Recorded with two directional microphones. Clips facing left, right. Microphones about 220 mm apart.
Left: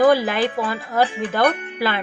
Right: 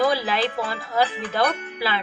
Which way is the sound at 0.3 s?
55° left (ahead or behind).